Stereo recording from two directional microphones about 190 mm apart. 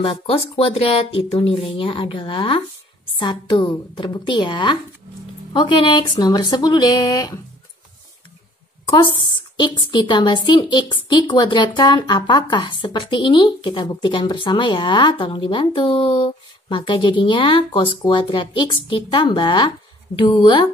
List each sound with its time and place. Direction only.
0.0 s speech: 30° left (ahead or behind)
8.9 s speech: 25° left (ahead or behind)